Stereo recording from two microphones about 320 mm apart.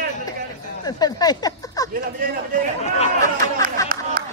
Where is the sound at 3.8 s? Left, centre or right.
Centre.